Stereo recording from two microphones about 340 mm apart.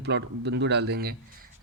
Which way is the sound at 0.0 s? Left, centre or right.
Right.